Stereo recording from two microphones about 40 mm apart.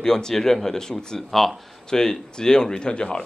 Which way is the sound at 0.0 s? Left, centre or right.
Centre.